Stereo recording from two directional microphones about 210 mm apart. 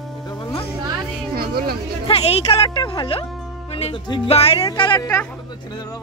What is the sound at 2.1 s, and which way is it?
Speech, 30° left (ahead or behind).